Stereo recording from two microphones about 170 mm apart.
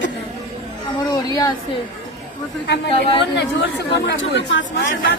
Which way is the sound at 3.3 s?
90° left.